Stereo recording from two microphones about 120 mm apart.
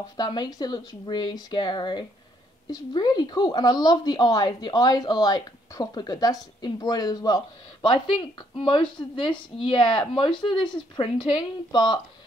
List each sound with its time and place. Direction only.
0.2 s speech: 35° left (ahead or behind)